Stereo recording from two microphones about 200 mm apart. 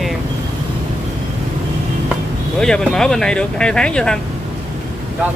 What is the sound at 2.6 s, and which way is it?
Speech, 5° left (ahead or behind).